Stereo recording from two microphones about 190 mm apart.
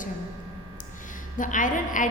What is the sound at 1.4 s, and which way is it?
Speech, 45° left (ahead or behind).